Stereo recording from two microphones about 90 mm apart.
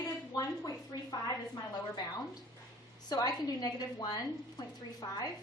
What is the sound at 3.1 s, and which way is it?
A woman's voice, 45° left (ahead or behind).